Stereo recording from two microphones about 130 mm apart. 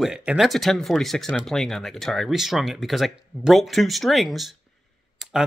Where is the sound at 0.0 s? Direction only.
5° right (ahead or behind).